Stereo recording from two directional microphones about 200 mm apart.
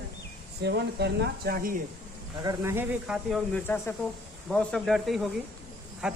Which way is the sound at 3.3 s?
10° left (ahead or behind).